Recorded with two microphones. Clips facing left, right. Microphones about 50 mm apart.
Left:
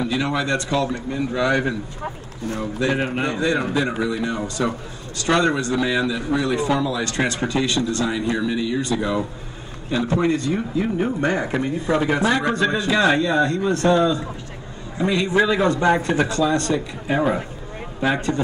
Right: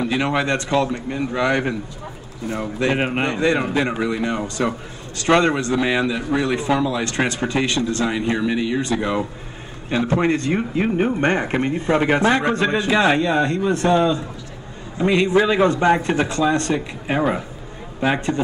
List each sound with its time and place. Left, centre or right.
0.1 s speech: right